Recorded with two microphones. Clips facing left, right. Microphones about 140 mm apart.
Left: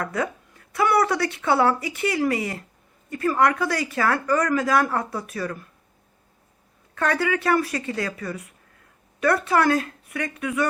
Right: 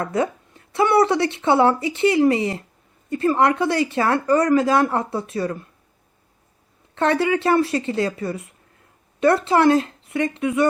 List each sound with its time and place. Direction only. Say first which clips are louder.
0.0 s speech: right 4 dB; 25° right (ahead or behind)
6.9 s speech: right 4 dB; 25° right (ahead or behind)